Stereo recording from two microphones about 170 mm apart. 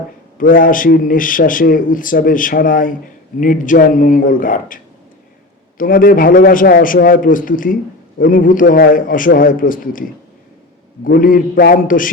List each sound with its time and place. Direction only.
0.3 s a man's voice: 55° left (ahead or behind)